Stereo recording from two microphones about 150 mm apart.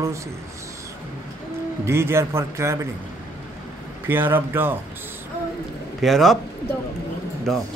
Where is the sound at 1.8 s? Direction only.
15° right (ahead or behind).